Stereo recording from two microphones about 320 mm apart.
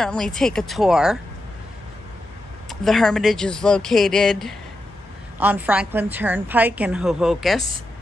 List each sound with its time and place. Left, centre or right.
0.0 s a woman's voice: centre
2.7 s a woman's voice: centre